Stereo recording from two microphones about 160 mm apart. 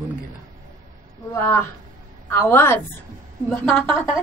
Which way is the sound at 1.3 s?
15° left (ahead or behind).